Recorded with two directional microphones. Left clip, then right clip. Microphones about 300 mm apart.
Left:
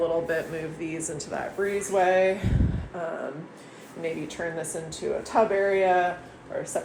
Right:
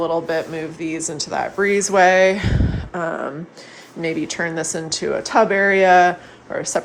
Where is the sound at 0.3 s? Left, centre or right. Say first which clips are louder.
Right 6 dB; centre.